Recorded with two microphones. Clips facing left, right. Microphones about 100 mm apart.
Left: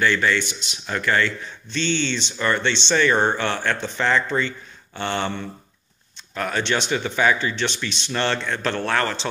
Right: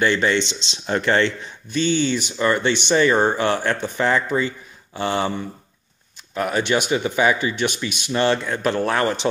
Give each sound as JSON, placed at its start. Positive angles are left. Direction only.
{"t": 0.0, "sound": "speech", "side_deg": -20}
{"t": 1.7, "sound": "speech", "side_deg": -10}